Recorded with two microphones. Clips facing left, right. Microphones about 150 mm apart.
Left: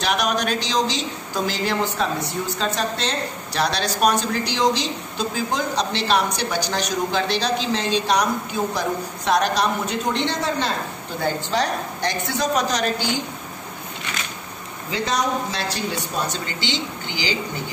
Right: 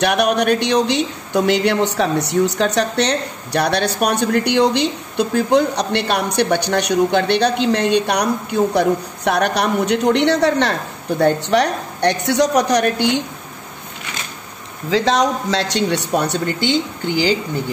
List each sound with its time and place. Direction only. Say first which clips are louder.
0.0 s a woman's voice: right 6 dB; 65° right (ahead or behind)
14.9 s speech: right 7 dB; 90° right; by 17.4 s 50° right (ahead or behind)